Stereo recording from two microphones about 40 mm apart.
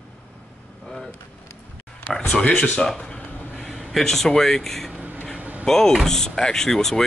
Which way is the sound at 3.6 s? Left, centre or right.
Centre.